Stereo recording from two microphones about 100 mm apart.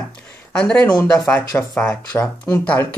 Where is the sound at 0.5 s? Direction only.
10° left (ahead or behind).